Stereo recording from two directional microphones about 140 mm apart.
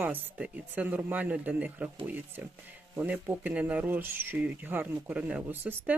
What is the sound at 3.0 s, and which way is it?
Speech, 10° right (ahead or behind).